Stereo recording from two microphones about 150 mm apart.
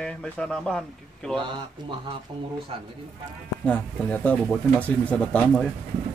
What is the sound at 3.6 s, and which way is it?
Speech, 5° left (ahead or behind).